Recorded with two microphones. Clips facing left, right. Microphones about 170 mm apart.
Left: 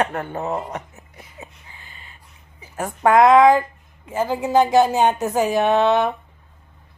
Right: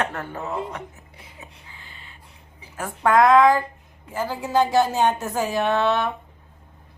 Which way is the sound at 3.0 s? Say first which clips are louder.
Left 3 dB; 20° left (ahead or behind).